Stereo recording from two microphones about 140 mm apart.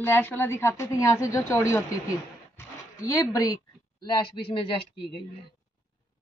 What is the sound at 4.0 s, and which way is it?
Speech, 35° left (ahead or behind).